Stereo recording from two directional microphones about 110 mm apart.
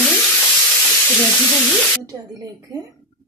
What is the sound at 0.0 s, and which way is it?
Frying, 5° left (ahead or behind).